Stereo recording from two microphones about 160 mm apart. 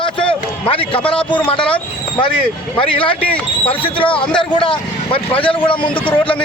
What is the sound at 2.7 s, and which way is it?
A man's voice, 35° left (ahead or behind).